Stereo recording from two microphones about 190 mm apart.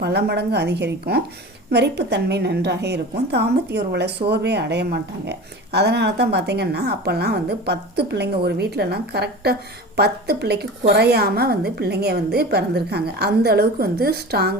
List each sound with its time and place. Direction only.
0.0 s a woman's voice: 60° right (ahead or behind)